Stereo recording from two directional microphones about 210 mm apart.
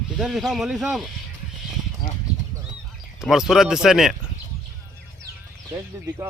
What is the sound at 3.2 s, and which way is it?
Speech, centre (ahead or behind).